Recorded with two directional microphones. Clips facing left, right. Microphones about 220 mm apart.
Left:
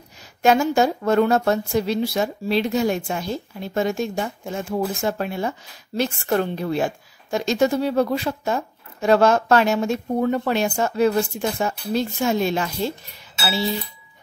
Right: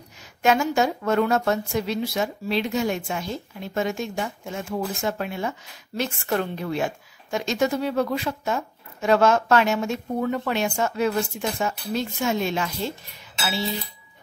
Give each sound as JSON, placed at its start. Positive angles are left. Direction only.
{"t": 0.4, "sound": "a woman's voice", "side_deg": 35}